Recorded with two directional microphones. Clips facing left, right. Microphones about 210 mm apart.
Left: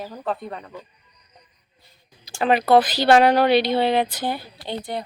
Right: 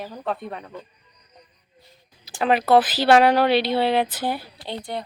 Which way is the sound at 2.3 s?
Centre (ahead or behind).